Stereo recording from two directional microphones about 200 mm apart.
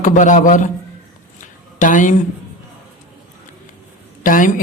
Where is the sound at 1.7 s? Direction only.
40° left (ahead or behind).